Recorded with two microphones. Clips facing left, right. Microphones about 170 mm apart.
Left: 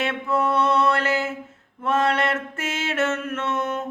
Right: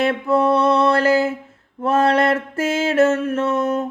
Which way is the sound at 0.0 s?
35° right (ahead or behind).